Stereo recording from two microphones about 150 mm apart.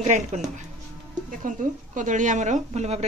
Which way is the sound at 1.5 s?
60° right (ahead or behind).